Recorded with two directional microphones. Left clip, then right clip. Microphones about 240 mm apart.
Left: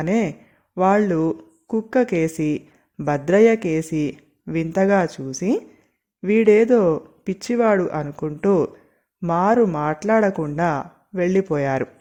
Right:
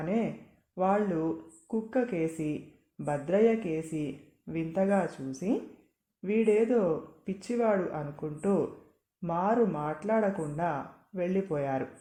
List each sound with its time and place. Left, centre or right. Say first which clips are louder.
0.0 s speech: left 10 dB; left